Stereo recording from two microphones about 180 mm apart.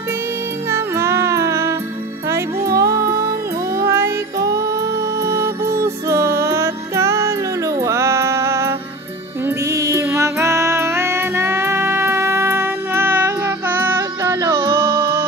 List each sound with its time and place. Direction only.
0.7 s music: 15° right (ahead or behind)